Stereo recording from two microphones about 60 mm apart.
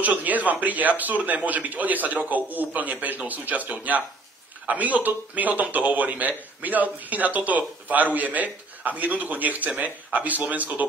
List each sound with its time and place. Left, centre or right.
0.0 s speech: right